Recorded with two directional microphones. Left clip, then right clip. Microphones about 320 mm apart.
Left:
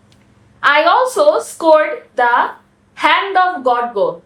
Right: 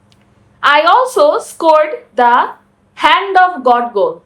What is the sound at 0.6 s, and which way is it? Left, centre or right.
A woman's voice, right.